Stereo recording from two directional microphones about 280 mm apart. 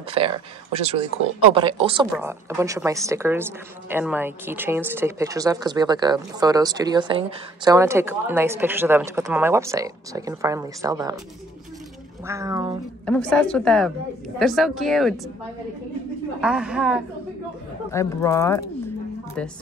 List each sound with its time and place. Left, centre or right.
0.1 s speech: centre
12.3 s speech: centre
13.0 s a woman's voice: centre
16.3 s a woman's voice: centre
17.9 s speech: centre